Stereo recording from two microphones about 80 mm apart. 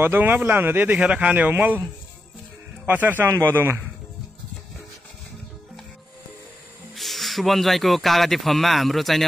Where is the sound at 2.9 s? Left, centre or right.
Right.